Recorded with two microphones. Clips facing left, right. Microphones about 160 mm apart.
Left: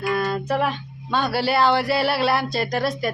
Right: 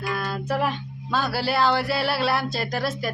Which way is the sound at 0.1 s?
Centre (ahead or behind).